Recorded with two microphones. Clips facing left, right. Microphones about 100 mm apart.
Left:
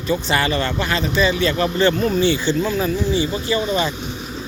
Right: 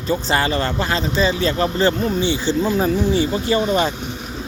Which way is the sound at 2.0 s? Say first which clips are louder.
Left 2 dB; 20° right (ahead or behind).